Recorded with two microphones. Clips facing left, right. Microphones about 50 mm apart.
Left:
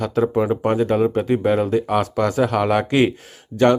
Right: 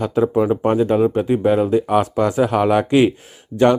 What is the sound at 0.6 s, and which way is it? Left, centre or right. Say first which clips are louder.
Speech: right 2 dB; centre.